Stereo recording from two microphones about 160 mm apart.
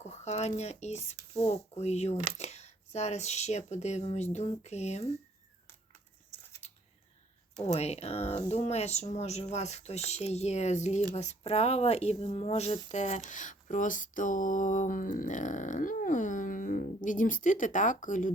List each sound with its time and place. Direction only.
0.0 s speech: 45° left (ahead or behind)
6.6 s typing: 45° left (ahead or behind)
7.7 s speech: 40° left (ahead or behind)